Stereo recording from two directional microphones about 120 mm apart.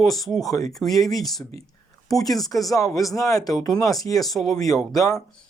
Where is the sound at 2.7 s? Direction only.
30° left (ahead or behind).